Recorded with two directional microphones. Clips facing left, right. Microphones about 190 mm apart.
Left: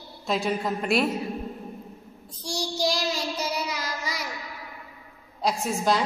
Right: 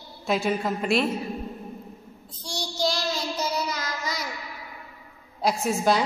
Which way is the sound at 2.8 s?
15° left (ahead or behind).